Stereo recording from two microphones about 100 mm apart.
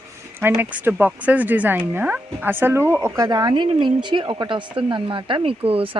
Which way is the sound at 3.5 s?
50° right (ahead or behind).